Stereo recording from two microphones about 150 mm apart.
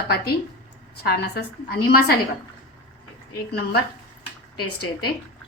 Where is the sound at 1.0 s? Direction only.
90° left.